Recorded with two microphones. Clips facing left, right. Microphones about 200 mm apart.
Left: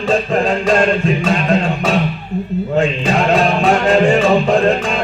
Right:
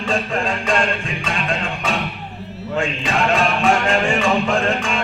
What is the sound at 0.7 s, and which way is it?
Music, 40° left (ahead or behind).